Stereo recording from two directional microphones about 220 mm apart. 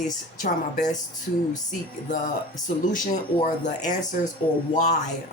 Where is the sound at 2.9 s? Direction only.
35° left (ahead or behind).